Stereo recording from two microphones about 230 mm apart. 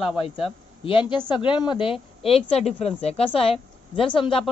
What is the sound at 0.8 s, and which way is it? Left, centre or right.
A woman's voice, left.